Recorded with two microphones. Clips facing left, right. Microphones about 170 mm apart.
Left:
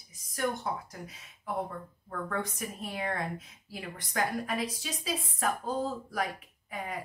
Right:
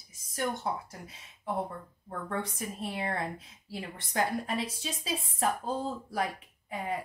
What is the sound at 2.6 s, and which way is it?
Speech, 30° right (ahead or behind).